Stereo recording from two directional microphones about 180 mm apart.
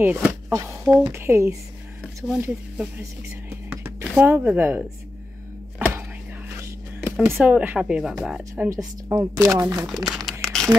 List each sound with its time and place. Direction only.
0.0 s speech: 10° right (ahead or behind)
3.4 s music: 10° right (ahead or behind)
7.1 s a sound: 15° right (ahead or behind)
7.3 s a woman's voice: 5° right (ahead or behind)
8.6 s speech: 15° right (ahead or behind)
10.0 s speech: centre (ahead or behind)
10.4 s crumpling: centre (ahead or behind)